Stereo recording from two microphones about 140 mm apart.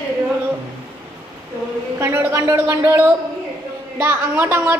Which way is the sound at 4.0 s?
15° right (ahead or behind).